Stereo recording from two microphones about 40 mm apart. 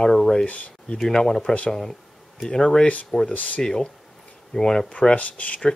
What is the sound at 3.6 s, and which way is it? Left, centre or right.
Speech, centre.